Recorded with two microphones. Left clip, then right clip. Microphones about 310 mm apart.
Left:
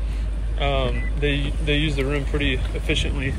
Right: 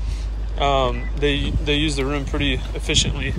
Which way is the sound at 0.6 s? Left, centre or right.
Centre.